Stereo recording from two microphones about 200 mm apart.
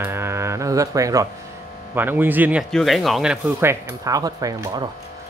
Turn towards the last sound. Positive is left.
turn(degrees=-20)  # may be behind; listen again after turning